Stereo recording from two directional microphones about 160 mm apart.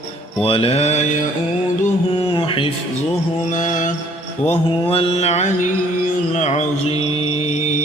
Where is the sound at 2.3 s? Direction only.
35° left (ahead or behind).